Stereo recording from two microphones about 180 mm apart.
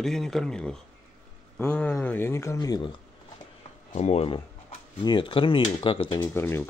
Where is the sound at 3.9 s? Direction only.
35° left (ahead or behind).